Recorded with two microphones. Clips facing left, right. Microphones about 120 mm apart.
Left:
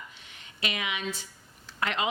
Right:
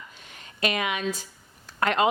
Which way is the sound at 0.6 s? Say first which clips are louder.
Right 6 dB; 45° right (ahead or behind).